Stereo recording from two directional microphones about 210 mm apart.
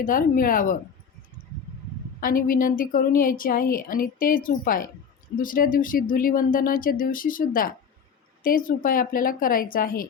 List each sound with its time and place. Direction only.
0.0 s a woman's voice: 40° left (ahead or behind)
2.2 s a woman's voice: 40° left (ahead or behind)